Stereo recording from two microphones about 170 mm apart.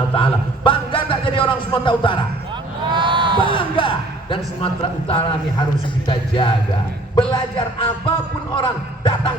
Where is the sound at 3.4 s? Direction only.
30° left (ahead or behind).